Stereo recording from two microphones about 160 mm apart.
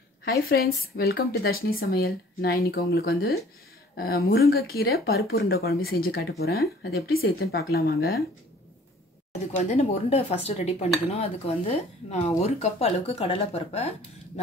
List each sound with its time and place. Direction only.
0.2 s speech: 75° left (ahead or behind)
9.6 s speech: 45° left (ahead or behind)